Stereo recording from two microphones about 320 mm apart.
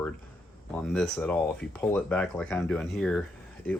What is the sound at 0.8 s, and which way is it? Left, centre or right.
Speech, centre.